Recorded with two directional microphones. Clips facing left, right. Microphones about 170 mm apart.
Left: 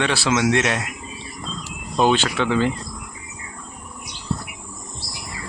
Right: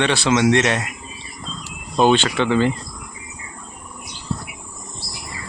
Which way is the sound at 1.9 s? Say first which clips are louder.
Right 3 dB; 5° left (ahead or behind).